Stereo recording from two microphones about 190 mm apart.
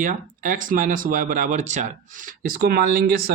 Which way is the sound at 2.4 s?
50° right (ahead or behind).